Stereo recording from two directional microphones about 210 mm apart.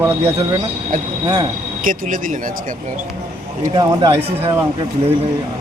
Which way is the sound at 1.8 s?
40° right (ahead or behind).